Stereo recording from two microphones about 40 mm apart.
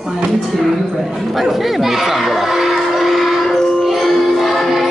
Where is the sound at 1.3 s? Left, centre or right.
Centre.